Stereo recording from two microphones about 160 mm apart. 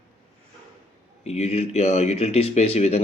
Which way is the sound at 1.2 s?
40° left (ahead or behind).